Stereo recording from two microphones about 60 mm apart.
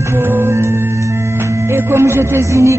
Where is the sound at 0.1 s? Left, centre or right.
Right.